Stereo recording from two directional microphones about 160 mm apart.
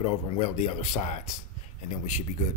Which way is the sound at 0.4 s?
45° left (ahead or behind).